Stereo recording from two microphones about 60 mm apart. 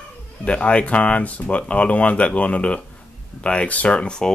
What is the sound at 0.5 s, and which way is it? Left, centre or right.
Speech, centre.